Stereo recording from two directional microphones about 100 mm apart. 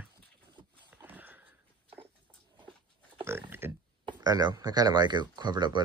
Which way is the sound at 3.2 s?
25° right (ahead or behind).